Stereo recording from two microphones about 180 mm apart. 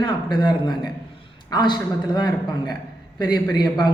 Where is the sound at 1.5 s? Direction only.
25° left (ahead or behind).